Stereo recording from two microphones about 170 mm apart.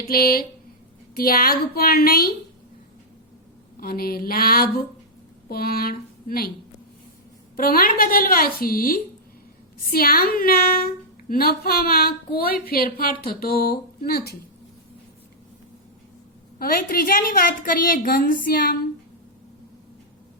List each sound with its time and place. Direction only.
0.1 s a woman's voice: 60° left (ahead or behind)
3.8 s a woman's voice: 60° left (ahead or behind)
7.5 s a woman's voice: 60° left (ahead or behind)
16.6 s a woman's voice: 60° left (ahead or behind)